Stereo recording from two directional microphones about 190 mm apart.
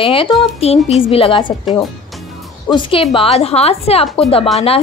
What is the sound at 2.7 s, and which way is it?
A woman's voice, 25° left (ahead or behind).